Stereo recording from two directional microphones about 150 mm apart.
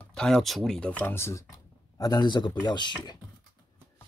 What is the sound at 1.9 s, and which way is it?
Speech, 25° left (ahead or behind).